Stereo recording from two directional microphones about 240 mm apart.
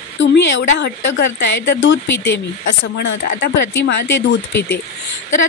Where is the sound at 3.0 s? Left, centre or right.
Left.